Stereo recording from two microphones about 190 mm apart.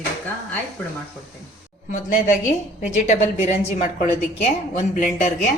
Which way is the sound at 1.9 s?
40° left (ahead or behind).